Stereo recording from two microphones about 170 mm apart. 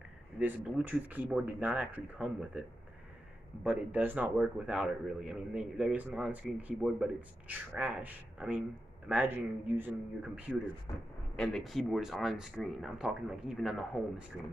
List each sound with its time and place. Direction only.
0.4 s a man's voice: 10° right (ahead or behind)
3.6 s a man's voice: 10° right (ahead or behind)
10.9 s a man's voice: 20° left (ahead or behind)
11.3 s speech: centre (ahead or behind)